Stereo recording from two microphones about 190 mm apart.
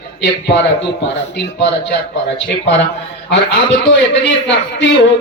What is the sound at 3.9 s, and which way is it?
A man's voice, 70° left (ahead or behind).